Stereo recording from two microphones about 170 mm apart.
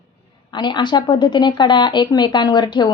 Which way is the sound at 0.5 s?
25° left (ahead or behind).